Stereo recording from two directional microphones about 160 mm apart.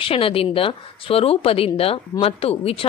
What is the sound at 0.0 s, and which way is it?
Speech, 35° left (ahead or behind).